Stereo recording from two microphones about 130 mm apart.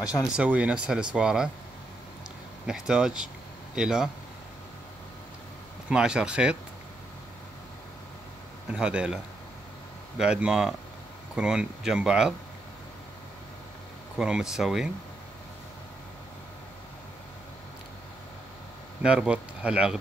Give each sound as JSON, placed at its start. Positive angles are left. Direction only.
{"t": 0.4, "sound": "speech", "side_deg": -10}
{"t": 2.6, "sound": "speech", "side_deg": -5}
{"t": 5.9, "sound": "speech", "side_deg": -5}
{"t": 8.7, "sound": "speech", "side_deg": -5}
{"t": 14.1, "sound": "speech", "side_deg": -5}
{"t": 19.0, "sound": "speech", "side_deg": -10}